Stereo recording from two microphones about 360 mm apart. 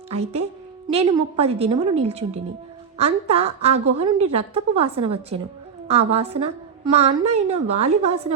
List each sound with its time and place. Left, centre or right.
0.9 s a woman's voice: centre